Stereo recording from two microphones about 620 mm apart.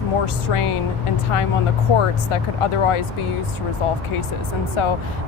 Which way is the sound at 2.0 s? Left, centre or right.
Left.